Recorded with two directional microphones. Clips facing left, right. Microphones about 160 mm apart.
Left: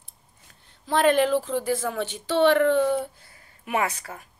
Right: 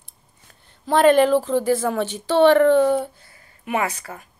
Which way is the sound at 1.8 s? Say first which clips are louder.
Right 6 dB; 90° right.